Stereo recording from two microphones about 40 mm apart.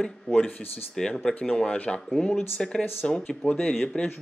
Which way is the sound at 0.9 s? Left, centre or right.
Centre.